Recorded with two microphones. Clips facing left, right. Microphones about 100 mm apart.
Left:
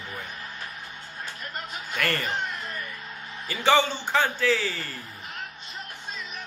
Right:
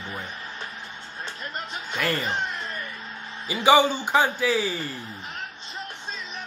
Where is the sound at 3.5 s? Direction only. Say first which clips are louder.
Right 4 dB; 15° right (ahead or behind).